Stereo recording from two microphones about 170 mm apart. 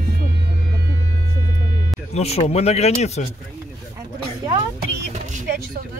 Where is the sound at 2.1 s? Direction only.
40° left (ahead or behind).